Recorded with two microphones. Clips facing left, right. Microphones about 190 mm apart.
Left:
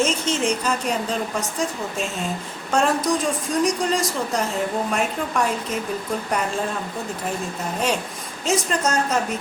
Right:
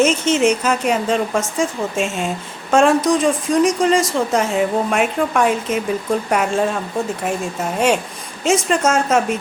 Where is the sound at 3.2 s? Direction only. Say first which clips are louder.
Right 6 dB; 90° right.